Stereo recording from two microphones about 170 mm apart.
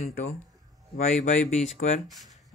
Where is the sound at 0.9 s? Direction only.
45° left (ahead or behind).